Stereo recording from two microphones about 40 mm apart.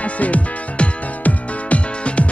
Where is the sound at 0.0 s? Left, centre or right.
Left.